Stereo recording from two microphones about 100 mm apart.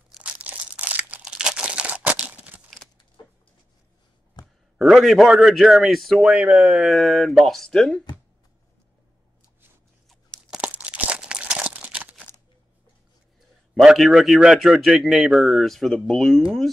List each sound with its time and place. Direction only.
0.2 s crumpling: 15° right (ahead or behind)
3.2 s a sound: 45° left (ahead or behind)
4.4 s a sound: 45° left (ahead or behind)
4.7 s a man's voice: centre (ahead or behind)
6.8 s a man's voice: centre (ahead or behind)
10.5 s crunch: 15° right (ahead or behind)
13.7 s a man's voice: centre (ahead or behind)